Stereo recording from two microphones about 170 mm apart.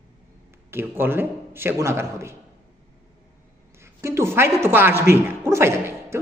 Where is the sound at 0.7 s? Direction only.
15° right (ahead or behind).